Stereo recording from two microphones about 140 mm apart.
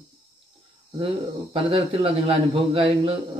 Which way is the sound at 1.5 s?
45° right (ahead or behind).